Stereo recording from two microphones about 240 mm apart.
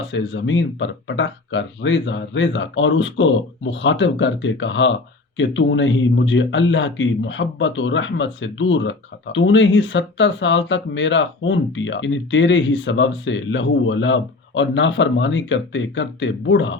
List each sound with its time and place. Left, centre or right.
0.1 s speech: left